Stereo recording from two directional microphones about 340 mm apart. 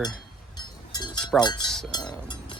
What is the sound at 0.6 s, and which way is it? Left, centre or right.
Cowbell, centre.